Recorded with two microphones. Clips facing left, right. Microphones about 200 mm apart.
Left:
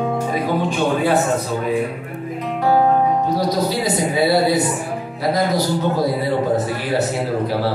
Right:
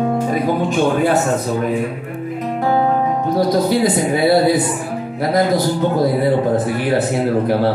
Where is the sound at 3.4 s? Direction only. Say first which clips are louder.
Right 5 dB; 50° right (ahead or behind).